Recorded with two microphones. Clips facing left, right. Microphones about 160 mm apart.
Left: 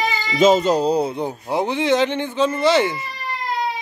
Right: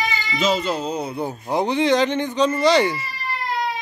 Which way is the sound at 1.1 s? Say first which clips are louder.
Left 1 dB; 10° left (ahead or behind).